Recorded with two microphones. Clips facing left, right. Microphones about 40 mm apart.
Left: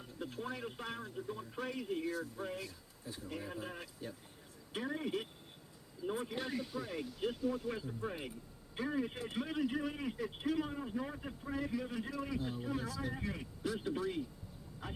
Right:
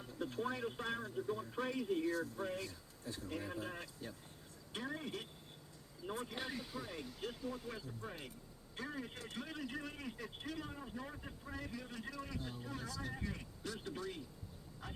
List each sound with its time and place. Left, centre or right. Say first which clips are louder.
0.0 s a man's voice: right 2 dB; centre
6.3 s a man's voice: left 5 dB; centre